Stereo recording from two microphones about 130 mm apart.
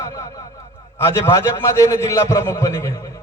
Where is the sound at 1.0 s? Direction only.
20° left (ahead or behind).